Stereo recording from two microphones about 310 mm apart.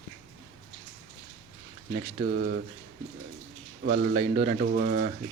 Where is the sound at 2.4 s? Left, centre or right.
Right.